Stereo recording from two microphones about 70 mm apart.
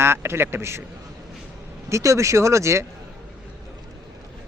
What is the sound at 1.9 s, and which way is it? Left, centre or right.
Speech, right.